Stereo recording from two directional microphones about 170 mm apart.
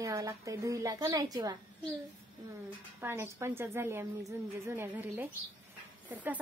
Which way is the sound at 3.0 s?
15° right (ahead or behind).